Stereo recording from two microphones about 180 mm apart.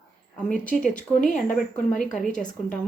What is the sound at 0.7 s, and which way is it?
Speech, 45° left (ahead or behind).